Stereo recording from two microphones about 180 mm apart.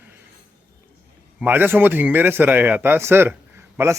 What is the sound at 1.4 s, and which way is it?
A man's voice, 10° right (ahead or behind).